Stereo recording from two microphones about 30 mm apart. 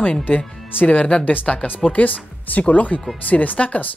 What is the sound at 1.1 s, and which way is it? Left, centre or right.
Speech, left.